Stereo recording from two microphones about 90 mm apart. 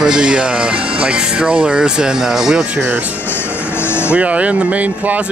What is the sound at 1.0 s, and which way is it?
Speech, 10° right (ahead or behind).